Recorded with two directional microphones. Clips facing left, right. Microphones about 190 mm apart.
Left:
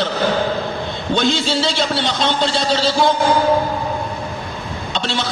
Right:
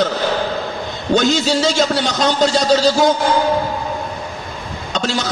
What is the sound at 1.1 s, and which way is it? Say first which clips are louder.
A man's voice: right 3 dB; 40° right (ahead or behind).